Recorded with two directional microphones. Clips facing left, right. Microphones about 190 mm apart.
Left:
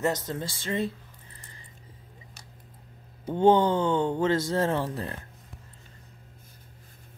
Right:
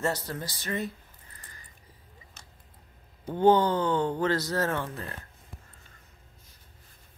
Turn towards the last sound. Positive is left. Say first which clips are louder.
# left 4 dB
turn(degrees=30)  # may be behind; listen again after turning